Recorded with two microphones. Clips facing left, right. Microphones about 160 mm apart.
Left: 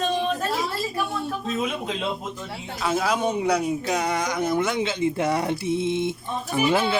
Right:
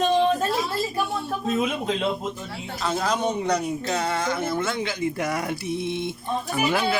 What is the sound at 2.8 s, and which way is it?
Speech, 5° left (ahead or behind).